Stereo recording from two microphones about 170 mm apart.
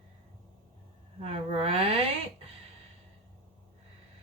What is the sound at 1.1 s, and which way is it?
Speech, 35° right (ahead or behind).